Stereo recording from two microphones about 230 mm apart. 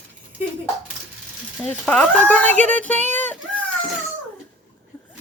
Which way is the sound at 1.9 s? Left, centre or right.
Centre.